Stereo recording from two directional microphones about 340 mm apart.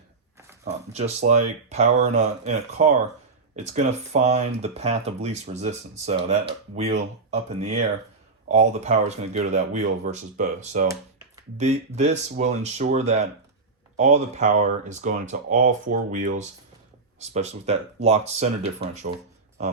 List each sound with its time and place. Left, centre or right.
0.6 s speech: centre